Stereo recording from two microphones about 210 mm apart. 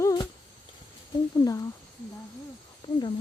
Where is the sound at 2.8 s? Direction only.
20° left (ahead or behind).